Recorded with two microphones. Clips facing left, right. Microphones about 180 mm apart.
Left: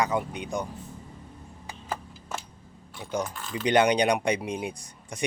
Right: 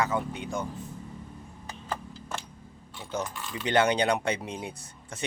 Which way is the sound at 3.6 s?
15° left (ahead or behind).